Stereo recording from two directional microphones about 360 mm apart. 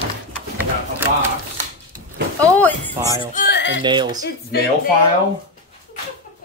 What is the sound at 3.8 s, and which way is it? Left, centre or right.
Speech, centre.